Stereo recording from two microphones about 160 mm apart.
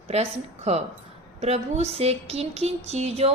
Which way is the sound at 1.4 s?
40° right (ahead or behind).